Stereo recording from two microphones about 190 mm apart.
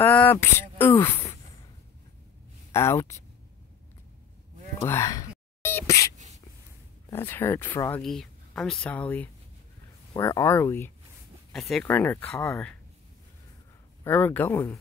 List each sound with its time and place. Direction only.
0.0 s speech: 10° left (ahead or behind)
2.7 s speech: 15° left (ahead or behind)
4.8 s whispering: 15° left (ahead or behind)
6.1 s a sound: 35° right (ahead or behind)
7.1 s speech: 10° left (ahead or behind)
8.0 s speech: centre (ahead or behind)
11.5 s speech: centre (ahead or behind)
14.0 s speech: 10° left (ahead or behind)